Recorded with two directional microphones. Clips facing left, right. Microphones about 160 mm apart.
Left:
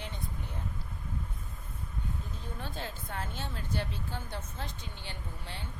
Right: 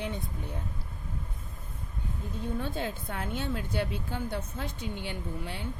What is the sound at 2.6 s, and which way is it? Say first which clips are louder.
Speech: right 7 dB; 55° right (ahead or behind).